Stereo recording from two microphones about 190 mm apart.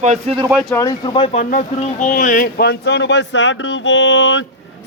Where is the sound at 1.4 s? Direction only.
45° left (ahead or behind); by 4.4 s 75° left (ahead or behind).